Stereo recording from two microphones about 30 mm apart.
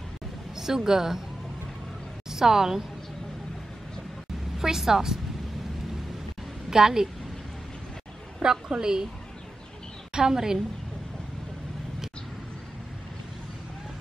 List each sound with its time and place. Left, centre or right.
0.6 s speech: centre
2.3 s speech: centre
4.6 s speech: centre
6.7 s a woman's voice: centre
8.4 s a woman's voice: right
10.1 s a woman's voice: centre